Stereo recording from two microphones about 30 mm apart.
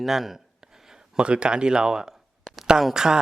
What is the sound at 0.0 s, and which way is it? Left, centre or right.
Speech, centre.